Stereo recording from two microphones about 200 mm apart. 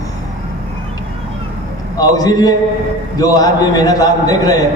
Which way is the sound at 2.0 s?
20° left (ahead or behind).